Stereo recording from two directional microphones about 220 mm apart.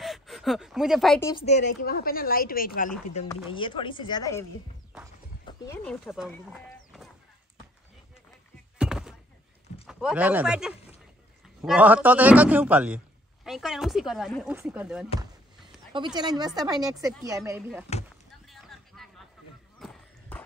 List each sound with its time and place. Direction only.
0.0 s speech: centre (ahead or behind)
1.4 s a woman's voice: 30° left (ahead or behind)
3.3 s speech: 20° left (ahead or behind)
5.7 s speech: centre (ahead or behind)
8.7 s thunk: 5° right (ahead or behind)
9.8 s a man's voice: centre (ahead or behind)
15.9 s a woman's voice: 20° right (ahead or behind)
18.5 s a sound: centre (ahead or behind)